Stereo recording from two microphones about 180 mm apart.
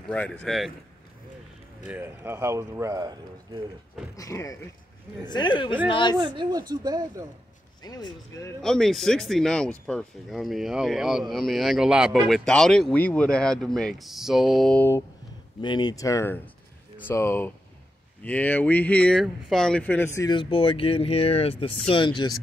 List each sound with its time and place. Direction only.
0.1 s speech: 5° left (ahead or behind)
1.9 s speech: 15° right (ahead or behind)
4.2 s speech: 15° left (ahead or behind)
6.1 s speech: 25° right (ahead or behind)
7.8 s speech: 20° left (ahead or behind)
8.6 s speech: centre (ahead or behind)
15.6 s speech: 25° left (ahead or behind)